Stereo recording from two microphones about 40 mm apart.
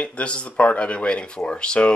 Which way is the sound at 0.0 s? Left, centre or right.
Left.